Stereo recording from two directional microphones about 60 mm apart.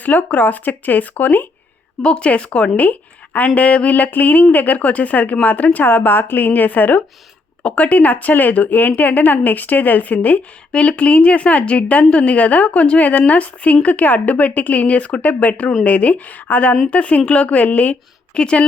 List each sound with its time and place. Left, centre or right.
0.0 s speech: left
2.0 s a woman's voice: centre